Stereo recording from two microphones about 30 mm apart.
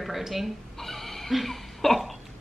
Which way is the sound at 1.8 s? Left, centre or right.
Centre.